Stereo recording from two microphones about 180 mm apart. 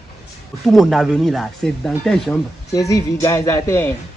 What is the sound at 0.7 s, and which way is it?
Speech, centre (ahead or behind).